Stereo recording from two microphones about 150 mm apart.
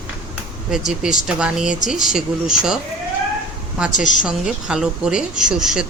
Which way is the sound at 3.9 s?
55° left (ahead or behind).